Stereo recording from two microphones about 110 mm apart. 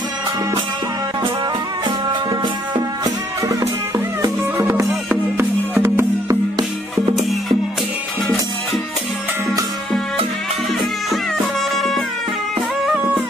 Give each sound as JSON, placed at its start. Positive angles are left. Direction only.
{"t": 4.2, "sound": "music", "side_deg": -30}
{"t": 7.2, "sound": "music", "side_deg": 0}